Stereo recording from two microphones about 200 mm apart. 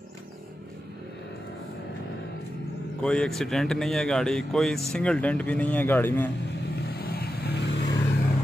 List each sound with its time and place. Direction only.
3.0 s speech: 5° left (ahead or behind)
6.8 s vehicle: 50° left (ahead or behind)
7.8 s vehicle: 20° left (ahead or behind)